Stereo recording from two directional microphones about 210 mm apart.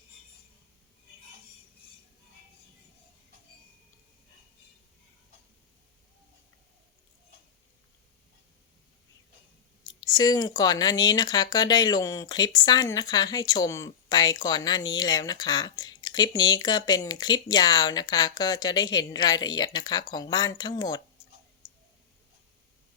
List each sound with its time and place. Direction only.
10.0 s speech: 20° left (ahead or behind)